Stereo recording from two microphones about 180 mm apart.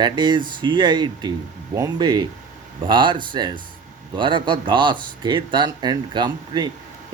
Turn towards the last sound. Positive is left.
turn(degrees=-25)  # may be behind; listen again after turning